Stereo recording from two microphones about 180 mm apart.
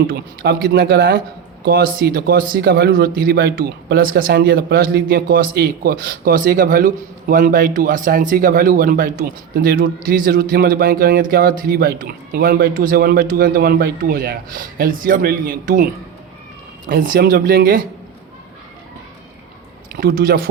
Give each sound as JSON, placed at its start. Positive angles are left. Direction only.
{"t": 0.1, "sound": "a man's voice", "side_deg": -60}
{"t": 16.9, "sound": "a man's voice", "side_deg": -55}
{"t": 20.0, "sound": "a man's voice", "side_deg": -55}